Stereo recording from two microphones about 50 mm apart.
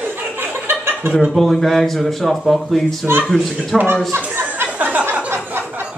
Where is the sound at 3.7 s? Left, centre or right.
Right.